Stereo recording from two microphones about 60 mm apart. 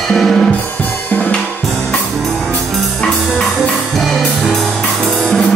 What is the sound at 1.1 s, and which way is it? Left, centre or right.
Drum kit, left.